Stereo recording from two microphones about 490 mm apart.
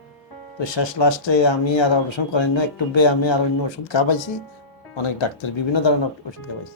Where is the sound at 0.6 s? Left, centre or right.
Left.